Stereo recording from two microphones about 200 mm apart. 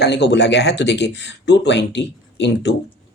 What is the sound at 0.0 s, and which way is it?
Speech, 60° left (ahead or behind).